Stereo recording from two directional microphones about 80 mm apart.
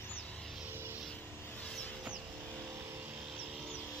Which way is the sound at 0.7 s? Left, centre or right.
Right.